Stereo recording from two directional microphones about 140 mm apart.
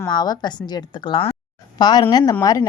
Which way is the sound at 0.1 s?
30° left (ahead or behind).